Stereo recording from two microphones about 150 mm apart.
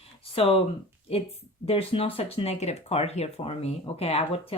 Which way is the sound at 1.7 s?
40° left (ahead or behind).